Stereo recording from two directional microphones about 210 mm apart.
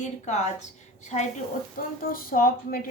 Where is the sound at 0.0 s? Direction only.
35° left (ahead or behind).